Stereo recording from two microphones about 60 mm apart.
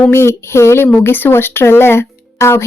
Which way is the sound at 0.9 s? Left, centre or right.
Left.